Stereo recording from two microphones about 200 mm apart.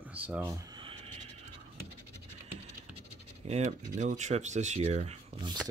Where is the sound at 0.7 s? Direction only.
25° right (ahead or behind).